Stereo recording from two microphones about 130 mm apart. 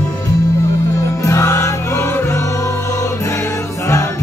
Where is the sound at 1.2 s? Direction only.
25° left (ahead or behind).